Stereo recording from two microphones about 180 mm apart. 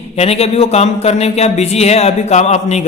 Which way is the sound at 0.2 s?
35° left (ahead or behind).